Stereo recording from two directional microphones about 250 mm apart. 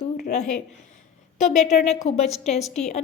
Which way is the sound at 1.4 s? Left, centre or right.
Left.